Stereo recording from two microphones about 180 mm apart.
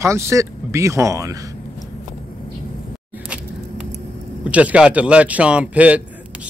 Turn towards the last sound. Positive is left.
turn(degrees=-10)  # may be behind; listen again after turning